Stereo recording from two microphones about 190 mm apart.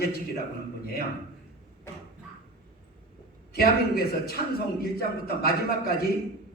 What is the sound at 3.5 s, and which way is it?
Music, 55° left (ahead or behind).